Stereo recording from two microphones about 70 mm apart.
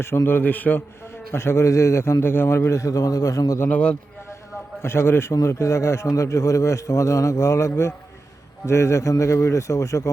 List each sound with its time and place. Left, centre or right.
0.3 s a man's voice: left
1.3 s a man's voice: left
3.7 s a man's voice: centre
4.8 s a man's voice: left